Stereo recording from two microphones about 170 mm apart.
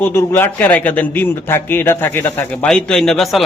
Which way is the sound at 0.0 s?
15° left (ahead or behind).